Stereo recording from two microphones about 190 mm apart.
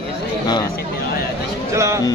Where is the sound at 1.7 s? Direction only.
15° right (ahead or behind).